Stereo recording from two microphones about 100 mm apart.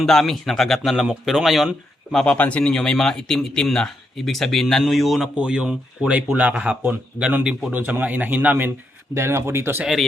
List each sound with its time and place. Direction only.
0.0 s speech: 5° left (ahead or behind)
2.1 s a man's voice: 15° left (ahead or behind); by 9.8 s 25° right (ahead or behind)